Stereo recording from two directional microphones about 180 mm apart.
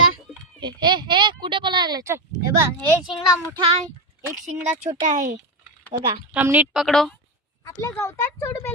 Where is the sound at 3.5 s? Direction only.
35° right (ahead or behind).